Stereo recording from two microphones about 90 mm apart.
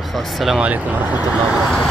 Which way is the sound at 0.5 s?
15° right (ahead or behind).